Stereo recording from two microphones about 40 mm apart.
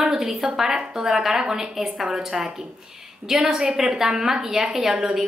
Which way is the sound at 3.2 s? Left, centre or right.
Centre.